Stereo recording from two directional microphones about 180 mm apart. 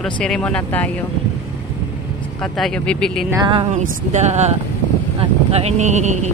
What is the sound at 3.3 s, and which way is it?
Speech, 25° right (ahead or behind).